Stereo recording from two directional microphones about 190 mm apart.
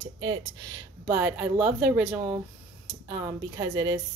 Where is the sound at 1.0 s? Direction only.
10° right (ahead or behind).